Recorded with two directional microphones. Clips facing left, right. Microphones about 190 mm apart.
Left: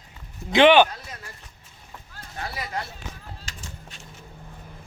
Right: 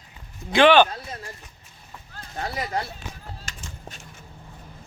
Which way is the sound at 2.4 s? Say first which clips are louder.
Right 4 dB; 35° right (ahead or behind).